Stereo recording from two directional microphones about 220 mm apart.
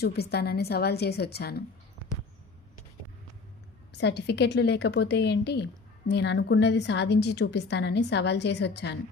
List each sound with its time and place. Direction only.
0.0 s a woman's voice: 45° left (ahead or behind)
3.9 s a woman's voice: 50° left (ahead or behind)